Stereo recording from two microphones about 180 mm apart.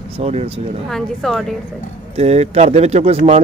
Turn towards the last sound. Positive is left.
turn(degrees=-35)  # may be behind; listen again after turning